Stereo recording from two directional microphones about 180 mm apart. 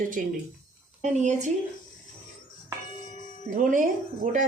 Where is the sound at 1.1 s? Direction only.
40° right (ahead or behind).